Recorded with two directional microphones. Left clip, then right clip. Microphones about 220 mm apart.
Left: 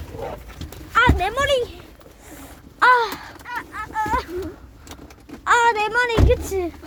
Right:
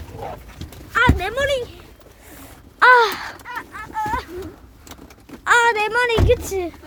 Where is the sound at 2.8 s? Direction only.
40° right (ahead or behind).